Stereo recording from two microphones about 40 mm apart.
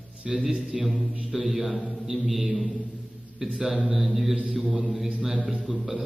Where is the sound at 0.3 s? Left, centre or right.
Centre.